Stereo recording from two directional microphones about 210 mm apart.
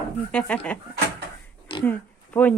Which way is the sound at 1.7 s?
25° left (ahead or behind).